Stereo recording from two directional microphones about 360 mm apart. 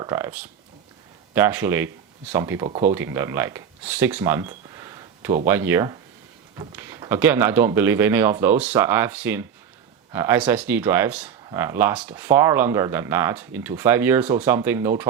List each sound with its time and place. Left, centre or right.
0.0 s speech: centre